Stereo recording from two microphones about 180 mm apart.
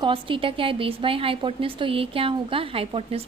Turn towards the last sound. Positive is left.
turn(degrees=-30)  # may be behind; listen again after turning